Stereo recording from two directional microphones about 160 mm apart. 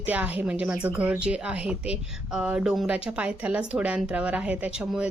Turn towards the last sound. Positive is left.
turn(degrees=-5)  # may be behind; listen again after turning